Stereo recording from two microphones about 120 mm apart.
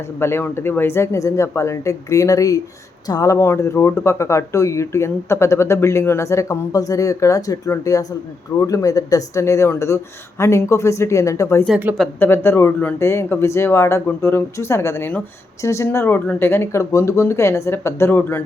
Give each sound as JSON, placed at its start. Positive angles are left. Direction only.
{"t": 0.2, "sound": "speech", "side_deg": 20}